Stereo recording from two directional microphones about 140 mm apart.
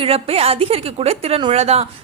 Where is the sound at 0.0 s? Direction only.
45° right (ahead or behind).